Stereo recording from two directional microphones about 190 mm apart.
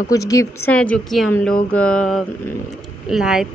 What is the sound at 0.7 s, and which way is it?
Speech, 5° left (ahead or behind).